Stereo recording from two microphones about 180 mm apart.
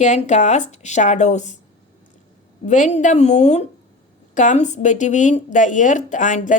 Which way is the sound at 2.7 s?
40° left (ahead or behind).